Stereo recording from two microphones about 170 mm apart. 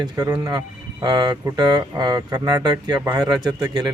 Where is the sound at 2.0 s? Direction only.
25° right (ahead or behind).